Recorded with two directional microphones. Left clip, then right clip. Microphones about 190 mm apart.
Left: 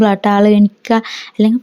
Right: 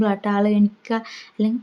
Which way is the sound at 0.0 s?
40° left (ahead or behind).